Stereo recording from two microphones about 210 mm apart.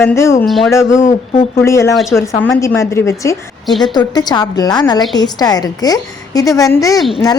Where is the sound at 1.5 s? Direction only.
15° left (ahead or behind).